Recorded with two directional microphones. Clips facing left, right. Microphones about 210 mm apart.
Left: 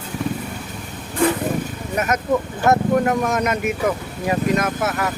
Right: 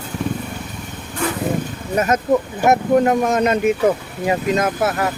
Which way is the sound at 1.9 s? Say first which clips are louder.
Right 4 dB; 30° right (ahead or behind).